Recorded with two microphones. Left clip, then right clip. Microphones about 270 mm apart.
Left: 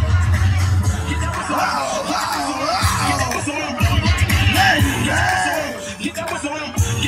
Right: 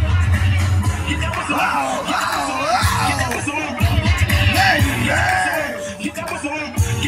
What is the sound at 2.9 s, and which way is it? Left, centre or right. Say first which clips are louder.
Music: even; centre.